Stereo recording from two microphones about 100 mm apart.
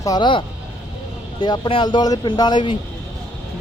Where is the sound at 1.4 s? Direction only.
45° left (ahead or behind).